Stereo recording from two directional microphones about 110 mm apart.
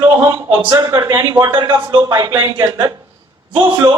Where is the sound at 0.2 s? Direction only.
15° right (ahead or behind).